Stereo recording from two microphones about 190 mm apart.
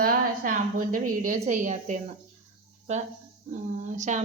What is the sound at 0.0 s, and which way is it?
A woman's voice, 45° right (ahead or behind).